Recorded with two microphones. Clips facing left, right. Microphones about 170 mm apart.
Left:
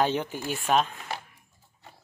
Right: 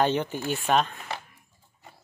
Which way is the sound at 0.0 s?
5° left (ahead or behind).